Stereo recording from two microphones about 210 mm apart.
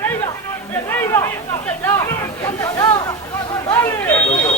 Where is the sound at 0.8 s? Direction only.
10° left (ahead or behind).